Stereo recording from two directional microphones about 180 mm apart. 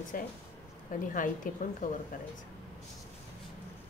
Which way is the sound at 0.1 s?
50° left (ahead or behind).